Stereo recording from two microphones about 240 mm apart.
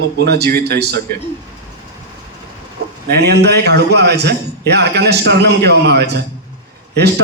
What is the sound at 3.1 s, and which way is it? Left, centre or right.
A man's voice, right.